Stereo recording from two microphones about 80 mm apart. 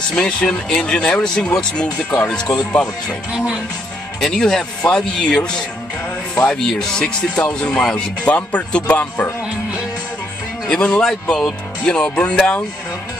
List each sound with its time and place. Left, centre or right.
0.1 s speech: centre
4.2 s speech: centre
10.7 s speech: centre